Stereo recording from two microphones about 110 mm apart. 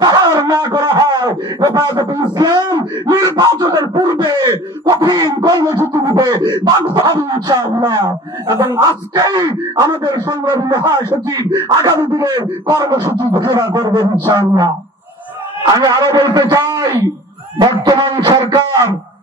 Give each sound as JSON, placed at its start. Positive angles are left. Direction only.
{"t": 0.0, "sound": "a sound", "side_deg": -40}
{"t": 9.5, "sound": "speech", "side_deg": -35}
{"t": 15.6, "sound": "speech", "side_deg": -35}